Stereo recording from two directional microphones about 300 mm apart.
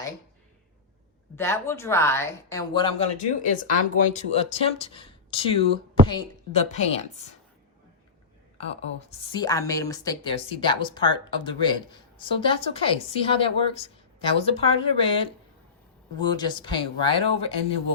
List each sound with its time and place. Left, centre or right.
1.4 s a woman's voice: centre
4.1 s speech: left
8.5 s a woman's voice: centre